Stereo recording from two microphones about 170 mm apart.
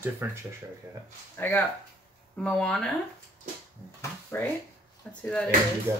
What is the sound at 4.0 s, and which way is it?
Speech, 10° left (ahead or behind).